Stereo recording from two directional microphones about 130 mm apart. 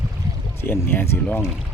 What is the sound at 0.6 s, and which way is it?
Speech, 15° left (ahead or behind).